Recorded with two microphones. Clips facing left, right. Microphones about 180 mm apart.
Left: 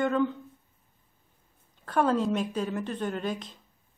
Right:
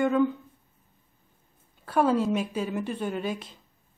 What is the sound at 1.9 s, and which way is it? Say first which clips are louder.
A woman's voice: right 2 dB; 5° right (ahead or behind).